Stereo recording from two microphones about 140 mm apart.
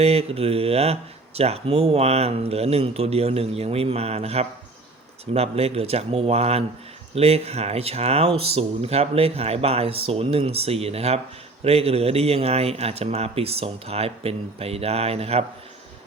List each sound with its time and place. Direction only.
0.0 s speech: 45° right (ahead or behind)